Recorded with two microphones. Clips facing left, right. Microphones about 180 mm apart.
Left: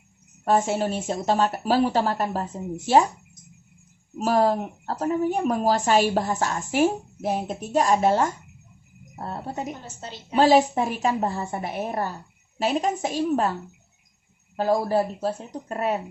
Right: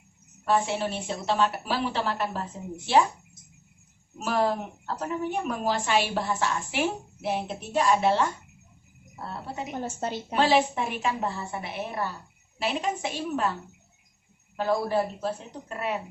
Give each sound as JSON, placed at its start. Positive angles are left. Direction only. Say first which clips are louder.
{"t": 0.4, "sound": "speech", "louder": "left 4 dB", "side_deg": 45}
{"t": 4.2, "sound": "a woman's voice", "louder": "left 5 dB", "side_deg": 40}
{"t": 9.8, "sound": "a woman's voice", "louder": "right 8 dB", "side_deg": -55}
{"t": 10.3, "sound": "a woman's voice", "louder": "left 6 dB", "side_deg": 40}
{"t": 14.5, "sound": "a woman's voice", "louder": "left 4 dB", "side_deg": 40}